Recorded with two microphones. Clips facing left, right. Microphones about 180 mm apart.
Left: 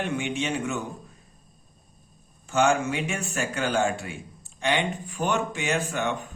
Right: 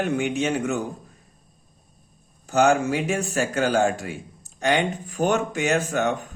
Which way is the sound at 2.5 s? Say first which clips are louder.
Right 4 dB; 40° right (ahead or behind).